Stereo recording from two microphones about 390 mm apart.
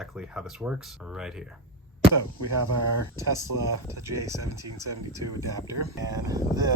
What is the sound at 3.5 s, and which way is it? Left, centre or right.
Speech, right.